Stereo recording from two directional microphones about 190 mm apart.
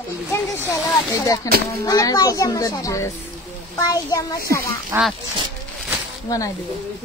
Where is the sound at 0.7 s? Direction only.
15° left (ahead or behind).